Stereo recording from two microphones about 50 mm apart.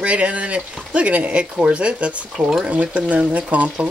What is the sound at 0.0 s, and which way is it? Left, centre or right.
Speech, right.